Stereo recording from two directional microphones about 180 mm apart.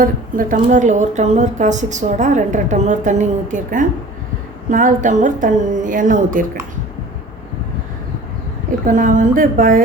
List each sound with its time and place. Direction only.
0.0 s a woman's voice: 50° right (ahead or behind)
8.9 s a woman's voice: 45° right (ahead or behind)